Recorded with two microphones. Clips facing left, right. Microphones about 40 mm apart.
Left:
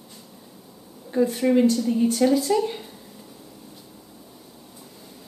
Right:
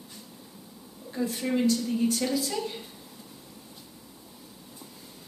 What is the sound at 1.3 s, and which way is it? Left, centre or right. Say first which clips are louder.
Speech: left 5 dB; centre.